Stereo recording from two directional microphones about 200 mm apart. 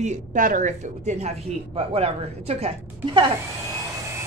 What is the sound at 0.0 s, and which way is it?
A woman's voice, 40° right (ahead or behind).